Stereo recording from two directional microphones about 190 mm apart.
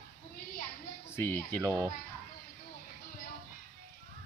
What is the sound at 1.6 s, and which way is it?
Speech, 20° right (ahead or behind).